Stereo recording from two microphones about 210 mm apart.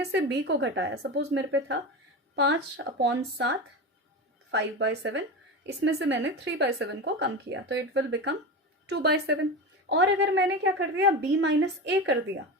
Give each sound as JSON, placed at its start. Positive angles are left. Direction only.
{"t": 0.0, "sound": "speech", "side_deg": -55}
{"t": 4.5, "sound": "a woman's voice", "side_deg": -55}